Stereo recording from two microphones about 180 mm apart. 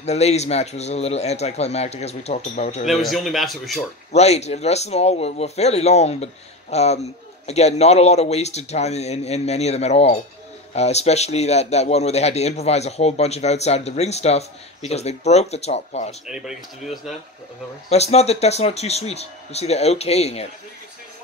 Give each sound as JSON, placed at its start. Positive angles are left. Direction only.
{"t": 0.0, "sound": "a man's voice", "side_deg": 35}
{"t": 2.9, "sound": "a man's voice", "side_deg": 0}
{"t": 4.1, "sound": "a man's voice", "side_deg": 35}
{"t": 16.3, "sound": "a man's voice", "side_deg": -5}
{"t": 17.8, "sound": "a man's voice", "side_deg": 35}